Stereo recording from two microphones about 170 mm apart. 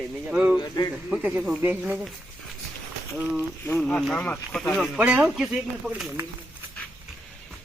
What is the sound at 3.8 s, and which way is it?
Speech, 5° left (ahead or behind).